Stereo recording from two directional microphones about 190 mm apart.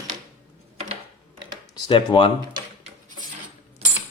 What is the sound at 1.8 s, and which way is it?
Speech, 25° left (ahead or behind).